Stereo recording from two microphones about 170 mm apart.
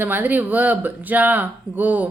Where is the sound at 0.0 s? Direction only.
10° right (ahead or behind).